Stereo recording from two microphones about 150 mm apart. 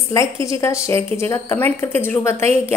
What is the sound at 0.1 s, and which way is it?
A woman's voice, 20° left (ahead or behind).